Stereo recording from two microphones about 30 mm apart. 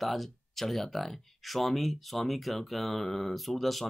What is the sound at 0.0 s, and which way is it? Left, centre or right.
Speech, centre.